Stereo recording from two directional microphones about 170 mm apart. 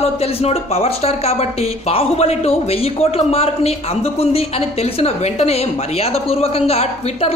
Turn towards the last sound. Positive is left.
turn(degrees=35)  # may be behind; listen again after turning